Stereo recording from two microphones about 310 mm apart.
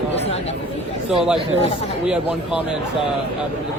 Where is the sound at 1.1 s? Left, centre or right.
Centre.